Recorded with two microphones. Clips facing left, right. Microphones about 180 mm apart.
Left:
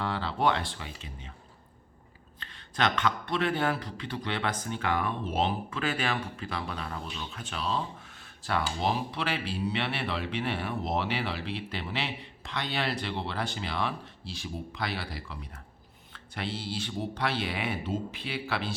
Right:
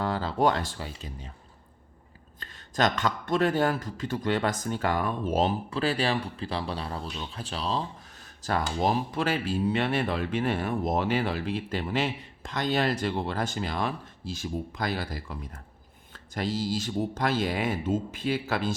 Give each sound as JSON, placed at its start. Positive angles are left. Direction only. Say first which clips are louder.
{"t": 0.0, "sound": "speech", "louder": "right 3 dB", "side_deg": -40}
{"t": 2.4, "sound": "a man's voice", "louder": "right 3 dB", "side_deg": -40}